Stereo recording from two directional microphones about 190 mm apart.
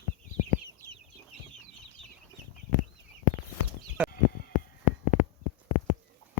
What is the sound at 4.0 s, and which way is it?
Sheep, 10° right (ahead or behind).